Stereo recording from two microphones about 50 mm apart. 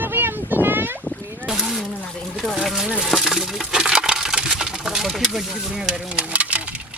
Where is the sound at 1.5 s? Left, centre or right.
Centre.